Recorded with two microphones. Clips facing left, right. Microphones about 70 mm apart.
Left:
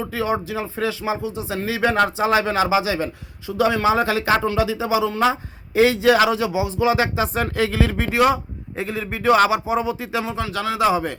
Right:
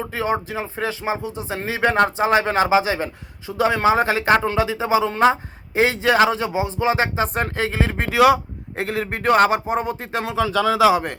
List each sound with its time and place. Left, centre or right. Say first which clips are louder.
0.1 s speech: right 1 dB; right
8.2 s a man's voice: right 4 dB; right
10.8 s speech: right 2 dB; right